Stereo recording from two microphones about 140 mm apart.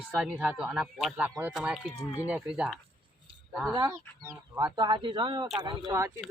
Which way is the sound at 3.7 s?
25° right (ahead or behind).